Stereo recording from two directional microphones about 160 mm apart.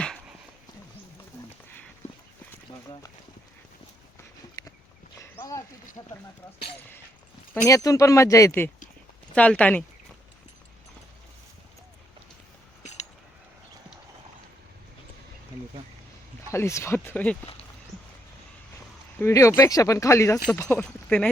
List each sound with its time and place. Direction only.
0.0 s a sound: 5° left (ahead or behind)
5.4 s a sound: 20° left (ahead or behind)
6.0 s speech: 25° left (ahead or behind)
7.5 s speech: 20° left (ahead or behind)
16.5 s speech: 15° left (ahead or behind)
19.2 s speech: 15° left (ahead or behind)
20.6 s speech: 5° left (ahead or behind)